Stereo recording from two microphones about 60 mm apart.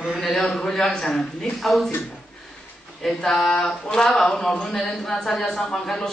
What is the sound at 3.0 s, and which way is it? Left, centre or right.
A woman's voice, centre.